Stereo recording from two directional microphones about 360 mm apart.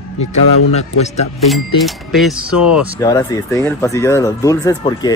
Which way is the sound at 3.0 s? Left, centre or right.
Centre.